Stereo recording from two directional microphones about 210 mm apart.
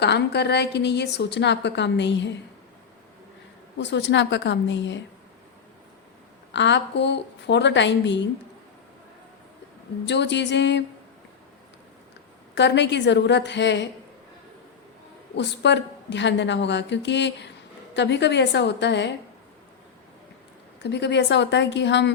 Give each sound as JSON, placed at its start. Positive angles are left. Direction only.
{"t": 0.0, "sound": "a woman's voice", "side_deg": 55}
{"t": 3.8, "sound": "a woman's voice", "side_deg": 60}
{"t": 6.5, "sound": "a woman's voice", "side_deg": 60}
{"t": 10.1, "sound": "a woman's voice", "side_deg": 55}
{"t": 12.5, "sound": "a woman's voice", "side_deg": 55}
{"t": 15.4, "sound": "a woman's voice", "side_deg": 55}
{"t": 20.8, "sound": "a woman's voice", "side_deg": 55}